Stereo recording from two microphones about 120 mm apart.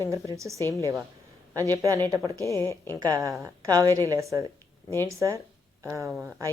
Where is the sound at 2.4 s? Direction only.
25° left (ahead or behind).